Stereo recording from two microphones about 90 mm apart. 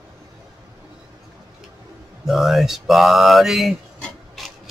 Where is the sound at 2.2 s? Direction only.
Centre (ahead or behind).